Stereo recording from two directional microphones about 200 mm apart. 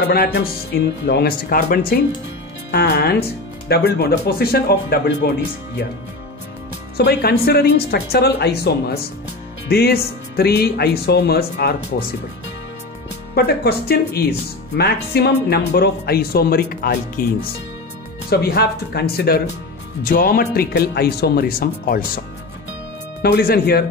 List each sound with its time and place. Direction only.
0.1 s speech: 50° left (ahead or behind)
7.0 s speech: 55° left (ahead or behind)
13.3 s speech: 50° left (ahead or behind)
18.3 s speech: 50° left (ahead or behind)
23.2 s speech: 50° left (ahead or behind)